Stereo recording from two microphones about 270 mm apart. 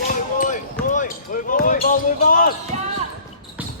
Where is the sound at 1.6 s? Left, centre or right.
Left.